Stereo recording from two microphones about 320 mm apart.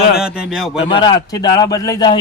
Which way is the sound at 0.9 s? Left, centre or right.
Centre.